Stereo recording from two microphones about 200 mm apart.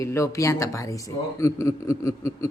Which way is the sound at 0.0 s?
15° left (ahead or behind).